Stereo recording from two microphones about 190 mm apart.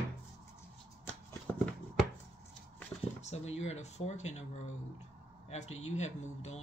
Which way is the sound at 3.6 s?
35° left (ahead or behind).